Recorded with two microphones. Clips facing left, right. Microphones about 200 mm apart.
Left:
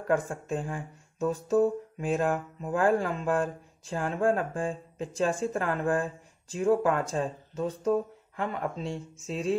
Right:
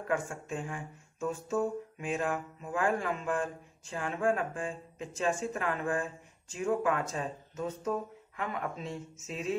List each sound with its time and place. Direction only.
0.1 s speech: 35° left (ahead or behind)